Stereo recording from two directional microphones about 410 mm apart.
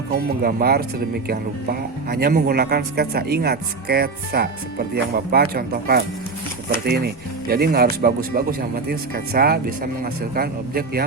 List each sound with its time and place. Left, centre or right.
0.1 s speech: right